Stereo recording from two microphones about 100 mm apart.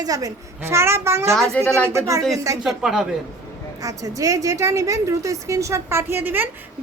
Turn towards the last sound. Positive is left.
turn(degrees=-20)  # may be behind; listen again after turning